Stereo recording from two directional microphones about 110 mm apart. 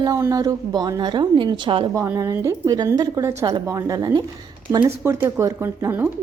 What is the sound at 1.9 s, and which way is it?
A woman's voice, 30° right (ahead or behind).